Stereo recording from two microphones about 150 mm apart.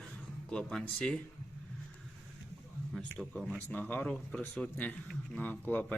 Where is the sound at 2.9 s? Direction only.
Centre (ahead or behind).